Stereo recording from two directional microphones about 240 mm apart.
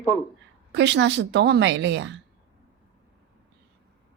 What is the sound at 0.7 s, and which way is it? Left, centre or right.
A woman's voice, right.